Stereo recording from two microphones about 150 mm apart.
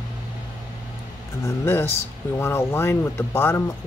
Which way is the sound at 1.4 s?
15° left (ahead or behind).